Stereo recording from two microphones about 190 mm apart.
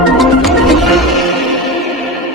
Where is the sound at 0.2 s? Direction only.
Centre (ahead or behind).